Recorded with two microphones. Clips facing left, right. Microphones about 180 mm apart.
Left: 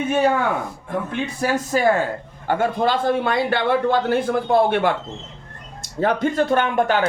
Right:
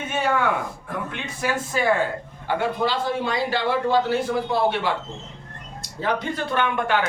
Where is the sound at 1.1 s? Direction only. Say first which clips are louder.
Left 5 dB; 35° left (ahead or behind); by 4.9 s 55° left (ahead or behind).